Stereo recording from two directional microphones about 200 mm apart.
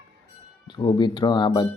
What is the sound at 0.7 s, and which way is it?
Speech, 25° left (ahead or behind).